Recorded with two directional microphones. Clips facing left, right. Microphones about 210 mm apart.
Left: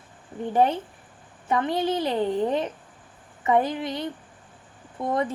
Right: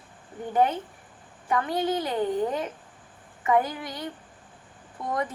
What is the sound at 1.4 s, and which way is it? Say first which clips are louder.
A woman's voice: left 2 dB; 25° left (ahead or behind).